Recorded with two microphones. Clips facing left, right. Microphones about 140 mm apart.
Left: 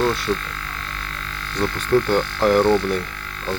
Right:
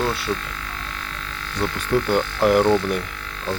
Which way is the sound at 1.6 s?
10° right (ahead or behind).